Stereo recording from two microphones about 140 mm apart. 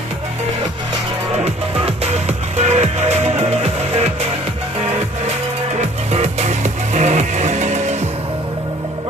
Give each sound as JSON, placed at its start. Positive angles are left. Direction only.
{"t": 1.5, "sound": "music", "side_deg": -50}
{"t": 6.1, "sound": "music", "side_deg": -50}